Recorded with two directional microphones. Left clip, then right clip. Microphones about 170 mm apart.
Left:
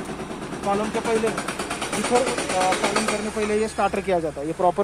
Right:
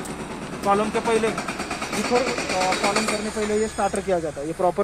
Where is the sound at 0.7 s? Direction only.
45° right (ahead or behind).